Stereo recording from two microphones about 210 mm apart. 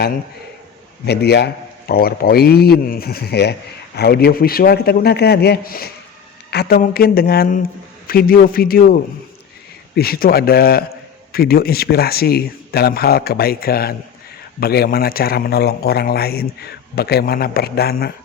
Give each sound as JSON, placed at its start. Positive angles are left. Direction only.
{"t": 1.0, "sound": "a man's voice", "side_deg": 50}